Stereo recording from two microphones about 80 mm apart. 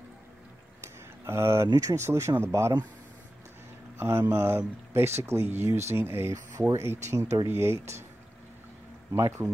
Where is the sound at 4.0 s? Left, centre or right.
Right.